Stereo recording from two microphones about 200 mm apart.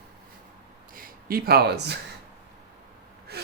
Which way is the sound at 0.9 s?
45° right (ahead or behind).